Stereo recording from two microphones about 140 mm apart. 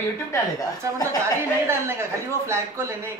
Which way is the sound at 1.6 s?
20° right (ahead or behind).